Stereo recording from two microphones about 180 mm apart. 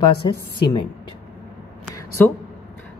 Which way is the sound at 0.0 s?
25° left (ahead or behind).